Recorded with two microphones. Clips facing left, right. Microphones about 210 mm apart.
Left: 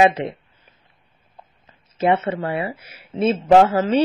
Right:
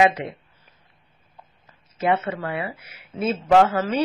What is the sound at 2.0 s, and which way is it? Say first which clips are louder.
Speech: left 4 dB; 25° left (ahead or behind).